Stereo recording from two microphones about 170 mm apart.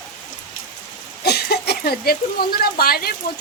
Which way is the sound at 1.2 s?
70° left (ahead or behind).